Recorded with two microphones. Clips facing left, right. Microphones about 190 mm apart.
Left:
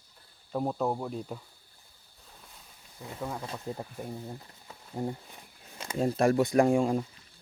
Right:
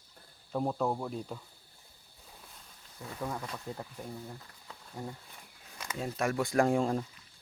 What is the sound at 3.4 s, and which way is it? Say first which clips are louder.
Speech: left 3 dB; 25° left (ahead or behind).